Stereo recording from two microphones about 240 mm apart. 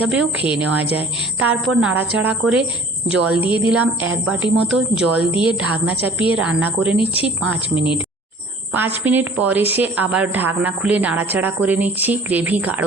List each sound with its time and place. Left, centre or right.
0.1 s a woman's voice: centre
3.4 s speech: left
3.7 s a woman's voice: centre
7.0 s speech: left
8.7 s a woman's voice: centre